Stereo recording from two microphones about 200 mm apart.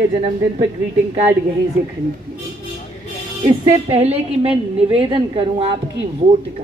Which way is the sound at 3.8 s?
30° right (ahead or behind).